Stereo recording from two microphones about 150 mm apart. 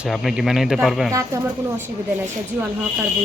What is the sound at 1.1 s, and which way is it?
Speech, 20° right (ahead or behind).